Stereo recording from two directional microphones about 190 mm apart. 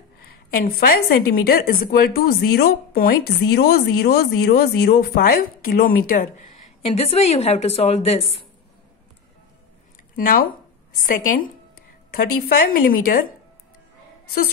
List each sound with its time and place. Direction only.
0.5 s a woman's voice: 50° left (ahead or behind)
6.8 s a woman's voice: 30° left (ahead or behind)
10.1 s a woman's voice: 50° left (ahead or behind)
14.2 s a woman's voice: 55° left (ahead or behind)